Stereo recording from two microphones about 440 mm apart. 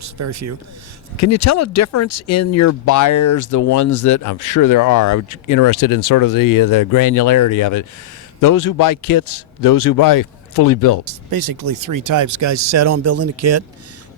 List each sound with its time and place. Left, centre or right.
0.0 s speech: right
1.1 s a man's voice: left
11.3 s speech: right